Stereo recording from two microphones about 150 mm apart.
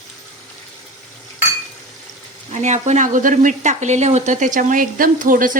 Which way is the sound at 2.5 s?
50° right (ahead or behind).